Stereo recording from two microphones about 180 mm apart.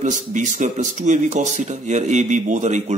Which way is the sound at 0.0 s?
40° right (ahead or behind).